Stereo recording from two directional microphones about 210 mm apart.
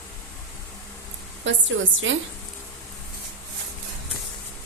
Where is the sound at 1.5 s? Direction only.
60° right (ahead or behind).